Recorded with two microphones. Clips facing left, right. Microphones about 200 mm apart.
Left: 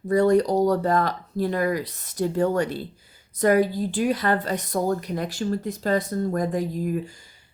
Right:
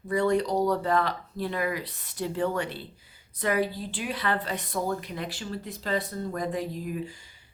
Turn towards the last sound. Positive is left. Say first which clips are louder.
# left 6 dB
turn(degrees=45)  # may be behind; listen again after turning